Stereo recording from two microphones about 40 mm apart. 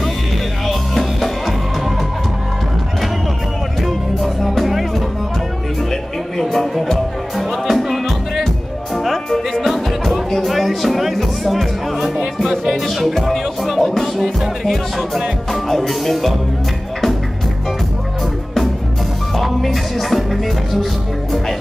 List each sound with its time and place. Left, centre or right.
0.7 s music: centre
3.8 s music: centre
6.3 s music: centre
19.3 s music: centre